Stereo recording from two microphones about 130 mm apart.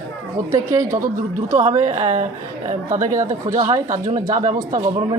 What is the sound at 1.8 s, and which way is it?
Speech, 60° right (ahead or behind).